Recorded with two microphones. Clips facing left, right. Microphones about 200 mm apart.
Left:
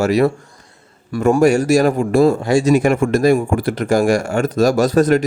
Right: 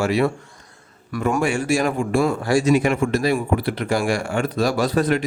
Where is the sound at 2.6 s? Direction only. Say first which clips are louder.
Left 5 dB; 45° left (ahead or behind).